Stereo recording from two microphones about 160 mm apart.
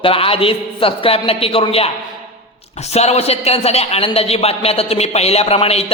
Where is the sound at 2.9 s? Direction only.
40° left (ahead or behind).